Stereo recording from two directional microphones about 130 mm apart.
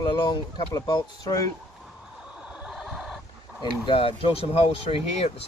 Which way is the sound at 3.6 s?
40° left (ahead or behind).